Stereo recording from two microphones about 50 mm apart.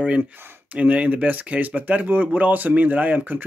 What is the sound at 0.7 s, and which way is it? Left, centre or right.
Speech, right.